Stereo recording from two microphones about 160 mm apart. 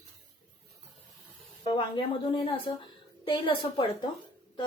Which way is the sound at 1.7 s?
35° left (ahead or behind).